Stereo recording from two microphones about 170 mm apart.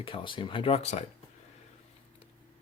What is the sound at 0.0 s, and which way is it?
Speech, 30° left (ahead or behind).